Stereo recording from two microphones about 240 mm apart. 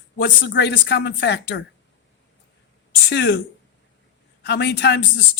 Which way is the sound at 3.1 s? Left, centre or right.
Left.